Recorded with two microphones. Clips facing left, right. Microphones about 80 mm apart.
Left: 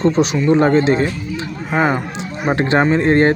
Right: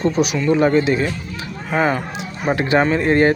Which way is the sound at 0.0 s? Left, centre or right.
Left.